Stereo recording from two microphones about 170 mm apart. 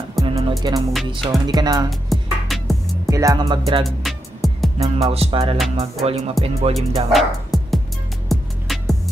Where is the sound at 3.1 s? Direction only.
20° right (ahead or behind).